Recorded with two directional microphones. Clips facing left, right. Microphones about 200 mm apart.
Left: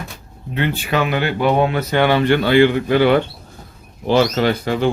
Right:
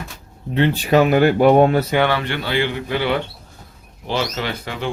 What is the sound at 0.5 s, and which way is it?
Speech, 35° right (ahead or behind).